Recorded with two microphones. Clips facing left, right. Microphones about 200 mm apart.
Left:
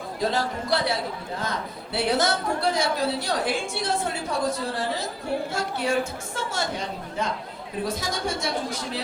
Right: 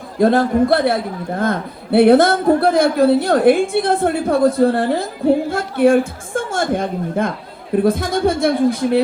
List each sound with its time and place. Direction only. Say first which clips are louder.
0.2 s a man's voice: right 14 dB; 55° right (ahead or behind)